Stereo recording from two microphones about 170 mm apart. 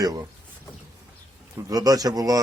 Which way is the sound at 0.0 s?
20° right (ahead or behind).